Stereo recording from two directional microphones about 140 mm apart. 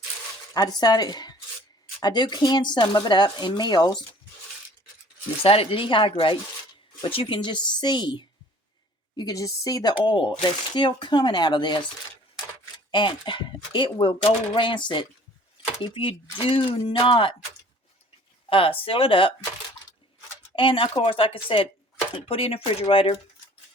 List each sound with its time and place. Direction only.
0.5 s speech: 30° left (ahead or behind)
5.4 s speech: 40° left (ahead or behind)
12.9 s speech: 35° left (ahead or behind)
18.4 s speech: 40° left (ahead or behind)
20.6 s speech: 40° left (ahead or behind)